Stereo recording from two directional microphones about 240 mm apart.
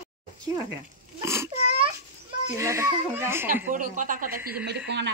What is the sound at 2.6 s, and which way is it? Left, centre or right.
Speech, centre.